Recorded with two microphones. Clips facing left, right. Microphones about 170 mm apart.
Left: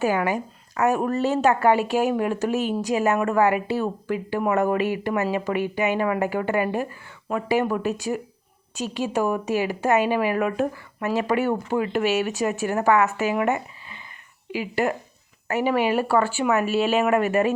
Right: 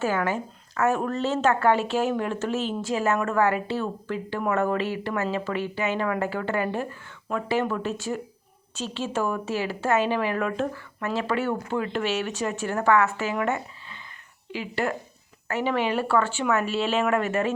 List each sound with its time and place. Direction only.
0.0 s speech: 15° left (ahead or behind)